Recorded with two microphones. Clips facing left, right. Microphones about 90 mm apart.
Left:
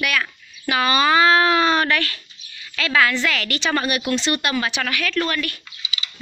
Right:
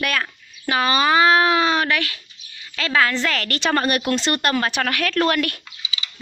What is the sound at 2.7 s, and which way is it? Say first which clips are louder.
A woman's voice: left 1 dB; 30° right (ahead or behind).